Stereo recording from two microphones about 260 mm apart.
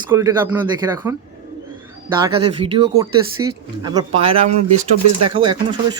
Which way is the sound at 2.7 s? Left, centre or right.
Centre.